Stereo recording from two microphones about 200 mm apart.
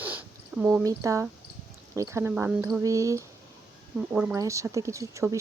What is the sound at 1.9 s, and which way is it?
Speech, 15° right (ahead or behind).